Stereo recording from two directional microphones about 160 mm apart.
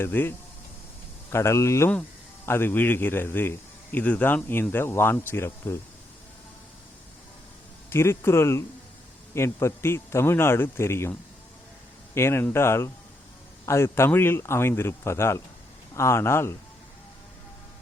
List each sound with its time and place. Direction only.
0.0 s a man's voice: 15° left (ahead or behind)
7.9 s a man's voice: 15° left (ahead or behind)